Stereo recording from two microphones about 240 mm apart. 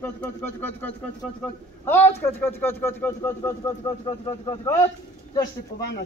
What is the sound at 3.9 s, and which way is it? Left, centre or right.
Speech, left.